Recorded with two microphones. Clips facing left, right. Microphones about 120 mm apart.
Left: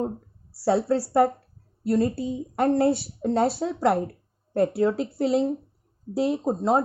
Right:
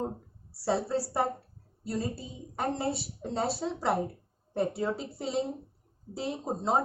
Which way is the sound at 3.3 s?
90° left.